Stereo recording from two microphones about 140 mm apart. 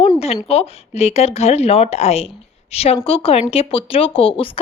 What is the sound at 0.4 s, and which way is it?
Speech, 45° left (ahead or behind).